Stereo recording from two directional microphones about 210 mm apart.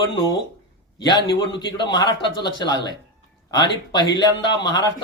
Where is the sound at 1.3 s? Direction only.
20° left (ahead or behind).